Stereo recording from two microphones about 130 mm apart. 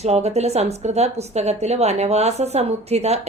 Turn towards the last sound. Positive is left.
turn(degrees=-55)  # may be behind; listen again after turning